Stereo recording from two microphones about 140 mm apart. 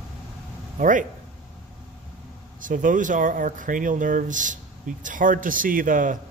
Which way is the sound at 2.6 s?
70° right (ahead or behind).